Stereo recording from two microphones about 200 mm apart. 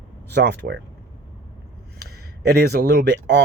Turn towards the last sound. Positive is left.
turn(degrees=-55)  # may be behind; listen again after turning